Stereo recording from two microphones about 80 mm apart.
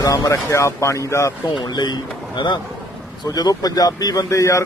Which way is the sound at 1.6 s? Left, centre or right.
Left.